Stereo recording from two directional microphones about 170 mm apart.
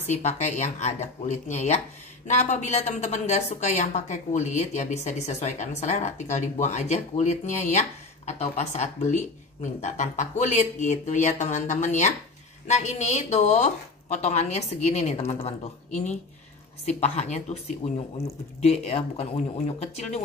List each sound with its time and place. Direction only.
0.1 s a woman's voice: 40° left (ahead or behind)